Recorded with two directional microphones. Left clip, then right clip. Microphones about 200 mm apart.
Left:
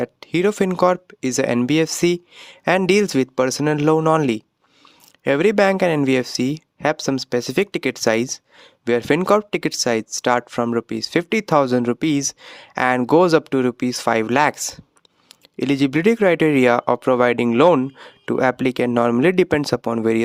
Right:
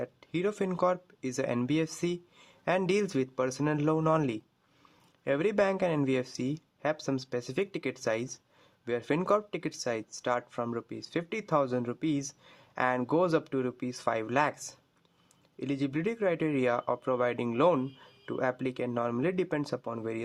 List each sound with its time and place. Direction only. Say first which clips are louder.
0.0 s speech: left 13 dB; 45° left (ahead or behind)